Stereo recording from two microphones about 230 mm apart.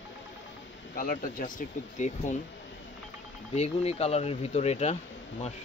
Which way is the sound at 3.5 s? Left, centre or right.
Left.